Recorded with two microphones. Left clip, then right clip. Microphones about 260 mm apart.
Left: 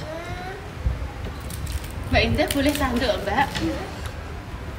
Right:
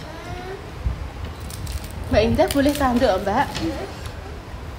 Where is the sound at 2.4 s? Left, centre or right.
Right.